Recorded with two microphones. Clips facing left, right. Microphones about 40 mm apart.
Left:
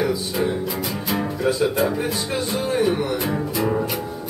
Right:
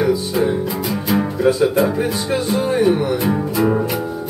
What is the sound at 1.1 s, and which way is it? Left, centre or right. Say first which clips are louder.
Music: right 6 dB; centre.